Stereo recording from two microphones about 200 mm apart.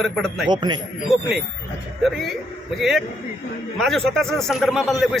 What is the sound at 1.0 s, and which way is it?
A man's voice, centre (ahead or behind).